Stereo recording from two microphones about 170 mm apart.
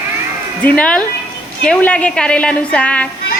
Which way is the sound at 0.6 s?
5° left (ahead or behind).